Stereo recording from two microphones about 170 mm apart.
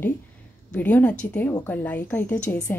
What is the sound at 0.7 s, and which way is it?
A woman's voice, 10° left (ahead or behind).